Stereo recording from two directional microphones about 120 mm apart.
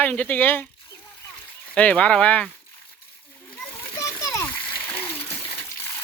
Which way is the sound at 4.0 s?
25° left (ahead or behind).